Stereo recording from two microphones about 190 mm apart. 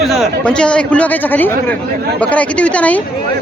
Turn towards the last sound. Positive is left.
turn(degrees=5)  # may be behind; listen again after turning